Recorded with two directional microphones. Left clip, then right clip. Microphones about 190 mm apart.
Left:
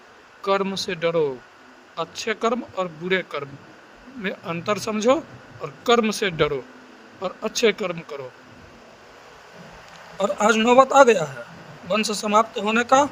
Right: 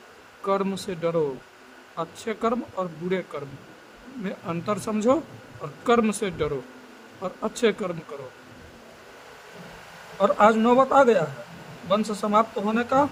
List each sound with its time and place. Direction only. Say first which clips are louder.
0.4 s a man's voice: left 3 dB; 25° left (ahead or behind)
10.2 s a man's voice: right 3 dB; 5° right (ahead or behind)
10.5 s speech: left 4 dB; 50° left (ahead or behind)